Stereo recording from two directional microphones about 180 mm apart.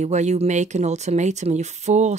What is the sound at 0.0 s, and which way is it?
Speech, 40° right (ahead or behind).